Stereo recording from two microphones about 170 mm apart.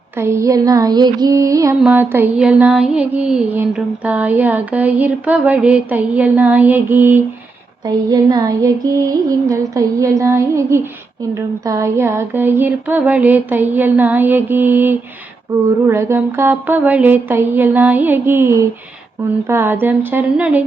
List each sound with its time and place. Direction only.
0.2 s female singing: 15° right (ahead or behind)
1.8 s mantra: 10° right (ahead or behind)
7.9 s female singing: 20° right (ahead or behind)
11.3 s mantra: 20° right (ahead or behind)